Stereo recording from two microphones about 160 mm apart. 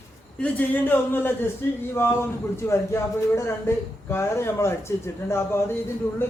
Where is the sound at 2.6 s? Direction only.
15° left (ahead or behind).